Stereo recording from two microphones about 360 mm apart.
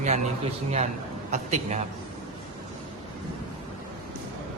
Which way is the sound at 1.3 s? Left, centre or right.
Centre.